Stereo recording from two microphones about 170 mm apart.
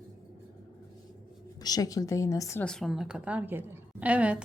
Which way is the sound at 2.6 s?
5° left (ahead or behind).